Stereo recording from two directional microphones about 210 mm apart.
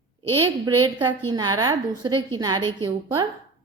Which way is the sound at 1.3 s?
20° right (ahead or behind).